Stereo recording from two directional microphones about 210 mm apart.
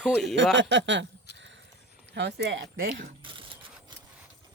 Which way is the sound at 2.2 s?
55° right (ahead or behind).